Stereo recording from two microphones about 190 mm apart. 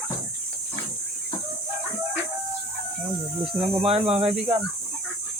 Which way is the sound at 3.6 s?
30° right (ahead or behind).